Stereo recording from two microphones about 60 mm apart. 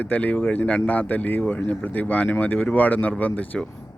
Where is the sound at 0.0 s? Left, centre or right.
Left.